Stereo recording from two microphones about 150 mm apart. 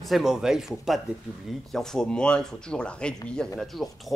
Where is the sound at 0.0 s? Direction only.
Centre (ahead or behind).